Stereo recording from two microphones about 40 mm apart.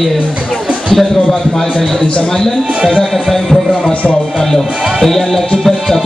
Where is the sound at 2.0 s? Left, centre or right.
Centre.